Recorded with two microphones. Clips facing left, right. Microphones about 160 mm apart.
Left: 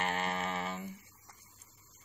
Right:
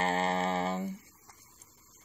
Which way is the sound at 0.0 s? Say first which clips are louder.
Right 5 dB; 35° right (ahead or behind).